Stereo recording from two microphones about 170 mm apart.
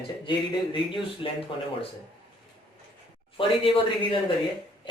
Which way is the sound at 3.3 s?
30° left (ahead or behind).